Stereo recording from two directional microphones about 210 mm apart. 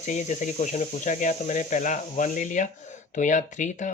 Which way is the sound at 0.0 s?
35° left (ahead or behind).